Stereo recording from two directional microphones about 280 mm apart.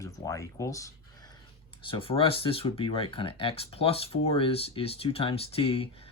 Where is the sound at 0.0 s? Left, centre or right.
Centre.